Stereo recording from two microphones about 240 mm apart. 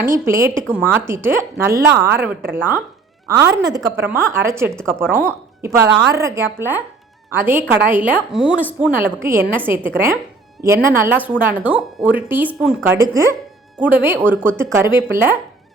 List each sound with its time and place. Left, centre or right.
0.0 s a woman's voice: centre